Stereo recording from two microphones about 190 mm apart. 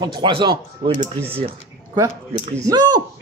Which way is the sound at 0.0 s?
25° right (ahead or behind).